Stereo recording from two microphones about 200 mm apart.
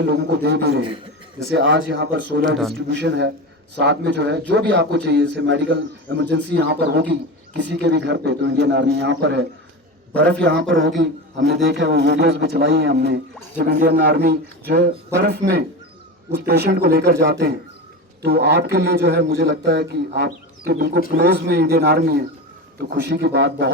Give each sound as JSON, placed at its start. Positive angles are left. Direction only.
{"t": 0.0, "sound": "a man's voice", "side_deg": -60}
{"t": 10.8, "sound": "a man's voice", "side_deg": -65}
{"t": 18.2, "sound": "a man's voice", "side_deg": -55}